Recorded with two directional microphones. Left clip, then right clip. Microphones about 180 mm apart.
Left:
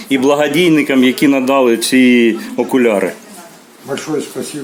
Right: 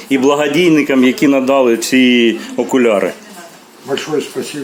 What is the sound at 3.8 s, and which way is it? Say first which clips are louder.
Speech: right 2 dB; 10° left (ahead or behind).